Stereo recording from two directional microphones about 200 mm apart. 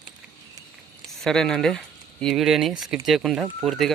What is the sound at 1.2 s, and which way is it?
Speech, centre (ahead or behind).